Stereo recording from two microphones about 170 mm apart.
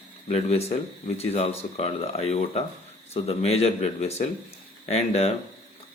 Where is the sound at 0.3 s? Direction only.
40° left (ahead or behind).